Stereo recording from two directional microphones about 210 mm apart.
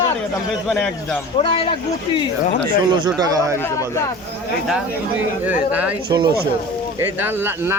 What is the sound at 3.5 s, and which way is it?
Speech, 15° left (ahead or behind).